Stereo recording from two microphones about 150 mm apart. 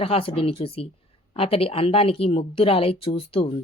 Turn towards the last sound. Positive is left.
turn(degrees=40)  # may be behind; listen again after turning